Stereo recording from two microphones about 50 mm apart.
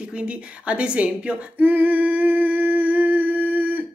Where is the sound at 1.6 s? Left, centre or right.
Right.